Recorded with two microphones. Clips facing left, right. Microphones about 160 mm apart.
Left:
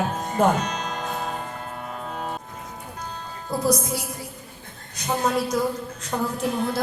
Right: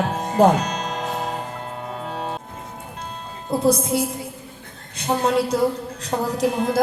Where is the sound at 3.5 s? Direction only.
25° right (ahead or behind).